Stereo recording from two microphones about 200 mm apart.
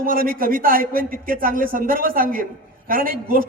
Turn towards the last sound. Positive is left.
turn(degrees=-45)  # may be behind; listen again after turning